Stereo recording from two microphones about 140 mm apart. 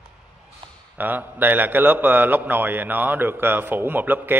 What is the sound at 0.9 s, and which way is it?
A man's voice, 15° right (ahead or behind).